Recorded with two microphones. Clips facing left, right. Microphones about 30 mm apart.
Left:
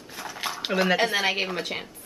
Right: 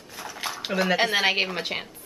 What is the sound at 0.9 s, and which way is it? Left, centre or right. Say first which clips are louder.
Speech: right 2 dB; centre.